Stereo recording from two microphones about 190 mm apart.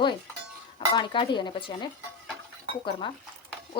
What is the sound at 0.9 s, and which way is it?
Speech, 25° left (ahead or behind).